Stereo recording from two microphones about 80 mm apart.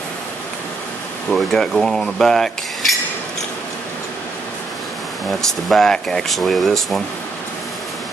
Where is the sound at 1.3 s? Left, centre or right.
Centre.